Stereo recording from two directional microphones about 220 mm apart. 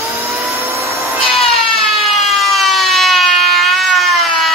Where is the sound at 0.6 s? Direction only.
15° right (ahead or behind).